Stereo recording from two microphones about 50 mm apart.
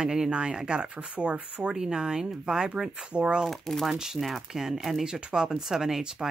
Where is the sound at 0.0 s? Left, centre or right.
Centre.